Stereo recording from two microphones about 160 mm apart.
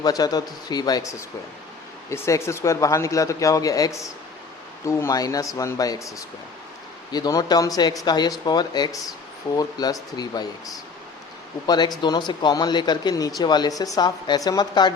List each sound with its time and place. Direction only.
0.0 s speech: 25° left (ahead or behind)
11.6 s speech: 25° left (ahead or behind)